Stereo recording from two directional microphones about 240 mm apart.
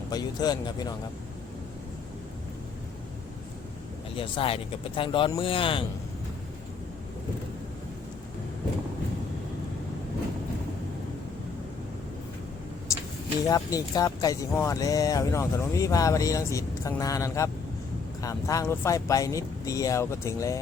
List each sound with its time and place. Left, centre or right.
0.1 s speech: centre
4.1 s speech: left
12.9 s vehicle: centre
13.5 s speech: centre